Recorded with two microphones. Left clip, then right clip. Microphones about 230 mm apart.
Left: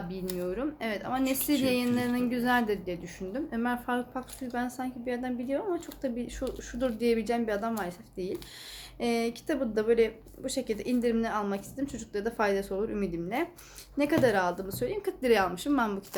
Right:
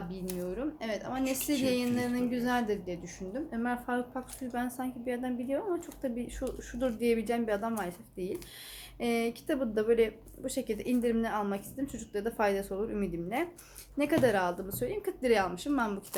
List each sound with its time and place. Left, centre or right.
0.1 s a woman's voice: centre